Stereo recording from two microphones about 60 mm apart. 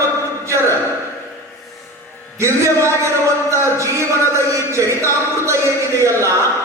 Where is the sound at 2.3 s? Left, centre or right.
Right.